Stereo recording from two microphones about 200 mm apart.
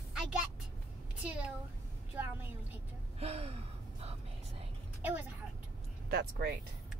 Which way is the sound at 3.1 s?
30° right (ahead or behind).